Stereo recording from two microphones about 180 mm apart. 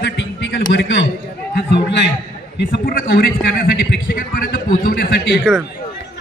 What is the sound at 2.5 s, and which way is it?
A man's voice, 60° left (ahead or behind).